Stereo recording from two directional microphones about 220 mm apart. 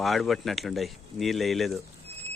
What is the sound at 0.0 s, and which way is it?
Speech, centre (ahead or behind).